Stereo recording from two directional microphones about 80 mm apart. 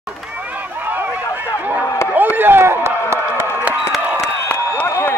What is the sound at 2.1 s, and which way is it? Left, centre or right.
Run, right.